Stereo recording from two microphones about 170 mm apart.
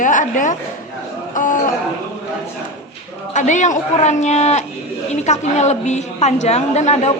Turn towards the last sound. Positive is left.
turn(degrees=40)  # may be behind; listen again after turning